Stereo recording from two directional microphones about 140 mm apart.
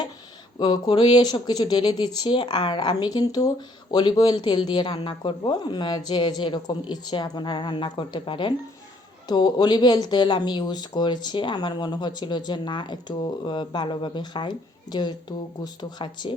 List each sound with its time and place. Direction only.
0.6 s speech: 35° left (ahead or behind)